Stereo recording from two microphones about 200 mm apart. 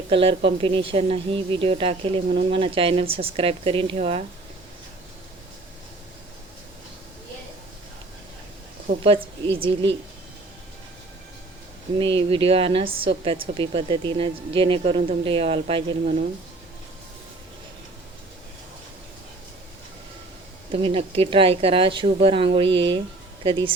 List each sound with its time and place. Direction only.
0.1 s a woman's voice: 30° right (ahead or behind)
9.0 s a woman's voice: 25° right (ahead or behind)
11.9 s a woman's voice: 25° right (ahead or behind)
20.8 s a woman's voice: 25° right (ahead or behind)